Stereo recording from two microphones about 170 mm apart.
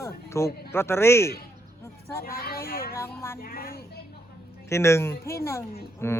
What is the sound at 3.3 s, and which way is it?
Speech, 60° left (ahead or behind).